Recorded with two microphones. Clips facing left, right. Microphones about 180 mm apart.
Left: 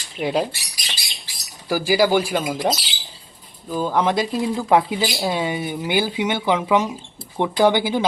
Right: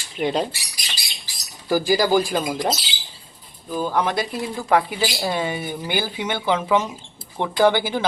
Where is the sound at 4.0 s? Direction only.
20° left (ahead or behind).